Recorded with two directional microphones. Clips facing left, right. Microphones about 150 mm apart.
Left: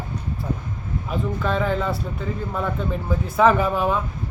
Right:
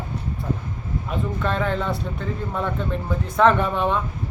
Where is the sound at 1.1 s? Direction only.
Centre (ahead or behind).